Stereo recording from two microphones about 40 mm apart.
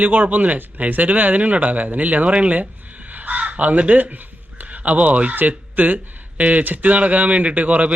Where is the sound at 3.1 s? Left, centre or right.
Right.